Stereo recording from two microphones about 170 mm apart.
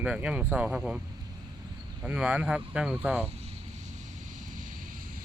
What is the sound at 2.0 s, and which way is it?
Speech, 5° right (ahead or behind).